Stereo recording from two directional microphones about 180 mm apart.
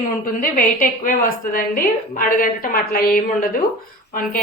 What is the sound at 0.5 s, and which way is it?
A woman's voice, 50° left (ahead or behind).